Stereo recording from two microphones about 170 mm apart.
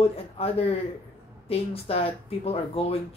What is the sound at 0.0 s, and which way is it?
Speech, 35° left (ahead or behind).